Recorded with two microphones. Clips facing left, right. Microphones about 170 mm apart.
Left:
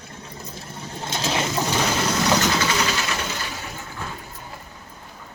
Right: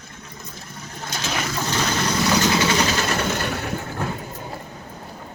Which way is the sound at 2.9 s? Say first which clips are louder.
Right 5 dB; 50° right (ahead or behind).